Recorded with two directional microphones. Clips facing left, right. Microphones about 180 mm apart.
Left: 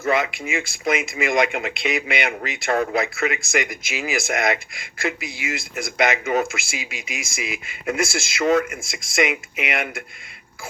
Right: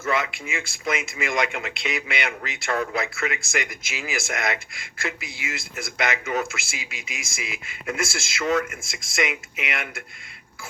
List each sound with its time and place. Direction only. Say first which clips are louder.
0.1 s speech: left 4 dB; 20° left (ahead or behind)